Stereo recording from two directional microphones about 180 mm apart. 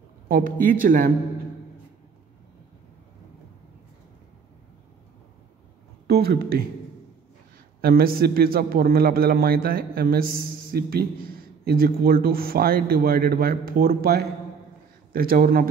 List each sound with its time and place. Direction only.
0.3 s speech: 50° right (ahead or behind)
6.0 s speech: 60° right (ahead or behind)
7.8 s a man's voice: 55° right (ahead or behind)